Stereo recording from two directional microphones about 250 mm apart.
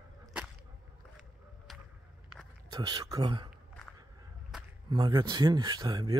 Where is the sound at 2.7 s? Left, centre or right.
Centre.